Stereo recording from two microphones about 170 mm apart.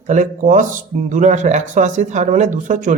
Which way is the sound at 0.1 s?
45° right (ahead or behind).